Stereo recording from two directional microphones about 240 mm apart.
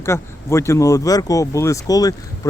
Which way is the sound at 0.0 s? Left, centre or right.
Centre.